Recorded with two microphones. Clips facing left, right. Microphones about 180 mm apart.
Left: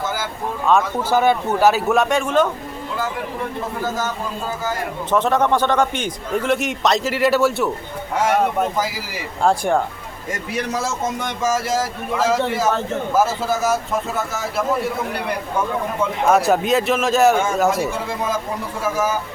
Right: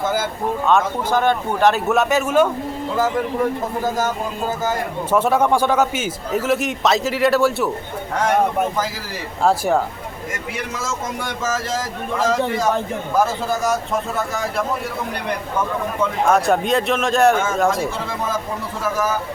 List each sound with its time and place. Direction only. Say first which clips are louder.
0.6 s a man's voice: left 1 dB; 5° left (ahead or behind)
5.1 s a man's voice: right 1 dB; 10° right (ahead or behind); by 8.4 s 5° left (ahead or behind)
9.4 s a man's voice: even; 5° right (ahead or behind)
10.5 s a man's voice: left 5 dB; 35° left (ahead or behind)
11.2 s a man's voice: left 3 dB; 10° left (ahead or behind)
16.3 s a man's voice: left 2 dB; centre (ahead or behind)